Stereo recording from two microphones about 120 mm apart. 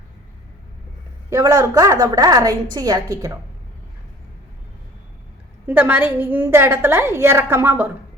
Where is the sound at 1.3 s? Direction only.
25° right (ahead or behind).